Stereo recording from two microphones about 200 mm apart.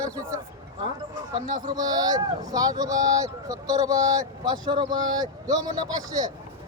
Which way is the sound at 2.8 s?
15° right (ahead or behind).